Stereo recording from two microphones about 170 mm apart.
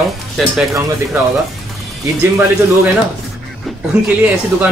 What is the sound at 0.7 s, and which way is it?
Speech, 20° right (ahead or behind).